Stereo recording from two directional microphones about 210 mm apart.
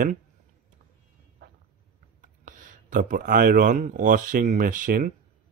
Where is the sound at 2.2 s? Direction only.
40° right (ahead or behind).